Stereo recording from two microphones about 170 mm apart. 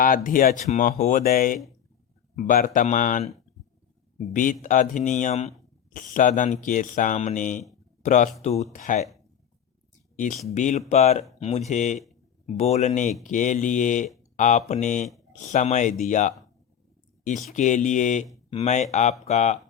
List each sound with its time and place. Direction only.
0.0 s speech: 55° left (ahead or behind)
4.4 s speech: 50° left (ahead or behind)
5.9 s speech: 50° left (ahead or behind)
10.5 s speech: 40° left (ahead or behind)